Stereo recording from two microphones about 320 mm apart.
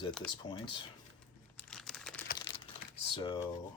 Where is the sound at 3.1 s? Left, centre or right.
Centre.